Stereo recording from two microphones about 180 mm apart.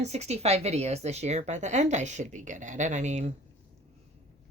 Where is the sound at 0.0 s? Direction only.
35° right (ahead or behind).